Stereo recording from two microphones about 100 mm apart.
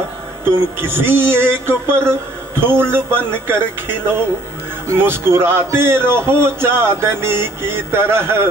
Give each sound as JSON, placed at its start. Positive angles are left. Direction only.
{"t": 0.7, "sound": "a man's voice", "side_deg": -20}